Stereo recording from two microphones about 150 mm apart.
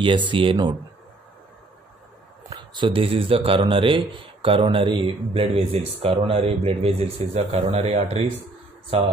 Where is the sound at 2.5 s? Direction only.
30° right (ahead or behind).